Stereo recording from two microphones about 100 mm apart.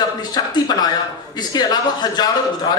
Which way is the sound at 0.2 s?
45° left (ahead or behind).